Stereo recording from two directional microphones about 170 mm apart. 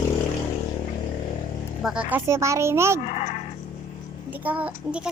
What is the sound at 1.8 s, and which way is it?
Speech, 5° right (ahead or behind).